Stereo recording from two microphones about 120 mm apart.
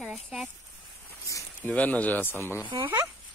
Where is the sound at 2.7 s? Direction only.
35° right (ahead or behind).